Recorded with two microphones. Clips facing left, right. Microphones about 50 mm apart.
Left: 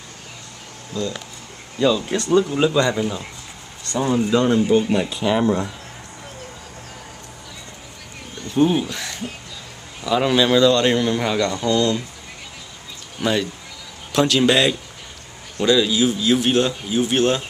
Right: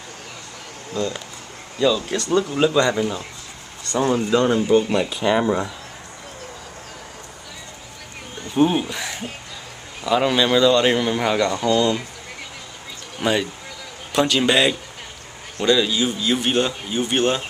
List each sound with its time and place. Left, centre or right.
0.9 s speech: right
1.8 s a man's voice: centre
8.5 s a man's voice: centre
13.2 s a man's voice: centre